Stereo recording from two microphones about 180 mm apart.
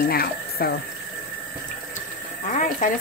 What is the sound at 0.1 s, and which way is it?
Speech, 55° left (ahead or behind).